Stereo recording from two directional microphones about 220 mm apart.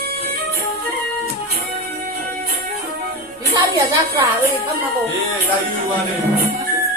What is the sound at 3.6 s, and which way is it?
Speech, 20° right (ahead or behind).